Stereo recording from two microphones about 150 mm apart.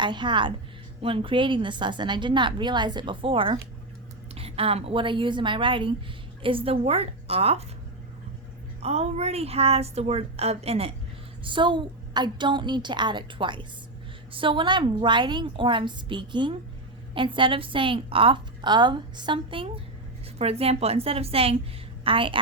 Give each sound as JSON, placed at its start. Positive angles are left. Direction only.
{"t": 0.0, "sound": "a woman's voice", "side_deg": -30}
{"t": 8.8, "sound": "a woman's voice", "side_deg": -45}